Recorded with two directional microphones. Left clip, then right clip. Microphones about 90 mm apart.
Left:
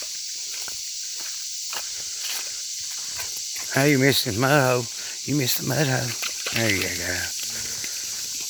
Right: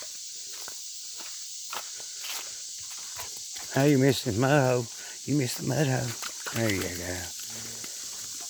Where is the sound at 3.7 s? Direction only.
15° right (ahead or behind).